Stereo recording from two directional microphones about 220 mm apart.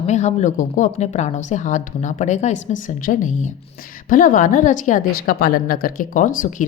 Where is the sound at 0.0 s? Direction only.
30° left (ahead or behind).